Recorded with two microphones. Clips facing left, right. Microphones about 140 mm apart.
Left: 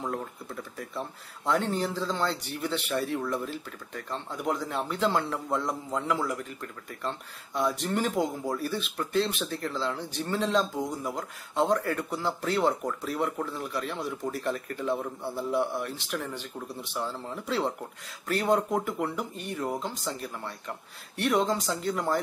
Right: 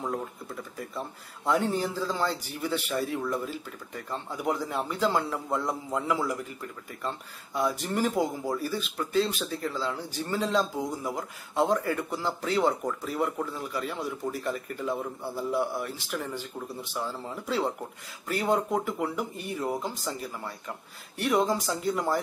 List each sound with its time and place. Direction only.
0.0 s speech: centre (ahead or behind)